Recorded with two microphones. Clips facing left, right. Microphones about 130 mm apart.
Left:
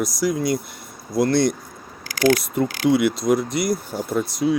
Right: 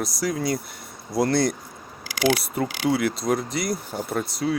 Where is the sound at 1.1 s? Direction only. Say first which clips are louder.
Left 3 dB; 10° right (ahead or behind).